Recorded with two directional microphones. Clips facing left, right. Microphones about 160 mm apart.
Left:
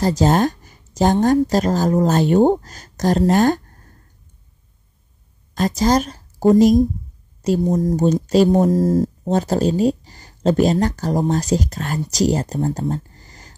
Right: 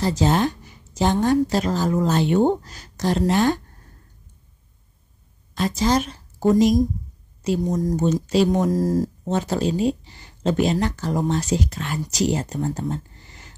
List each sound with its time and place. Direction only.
0.0 s speech: 45° left (ahead or behind)
5.5 s speech: 45° left (ahead or behind)